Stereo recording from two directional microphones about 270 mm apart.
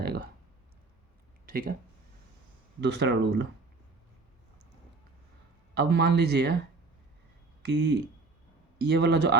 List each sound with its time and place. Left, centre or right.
0.0 s clicking: right
1.5 s speech: right
2.8 s speech: right
5.7 s speech: right
7.6 s speech: right